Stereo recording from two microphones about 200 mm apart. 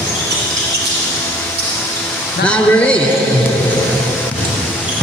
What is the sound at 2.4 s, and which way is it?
Speech, 5° left (ahead or behind).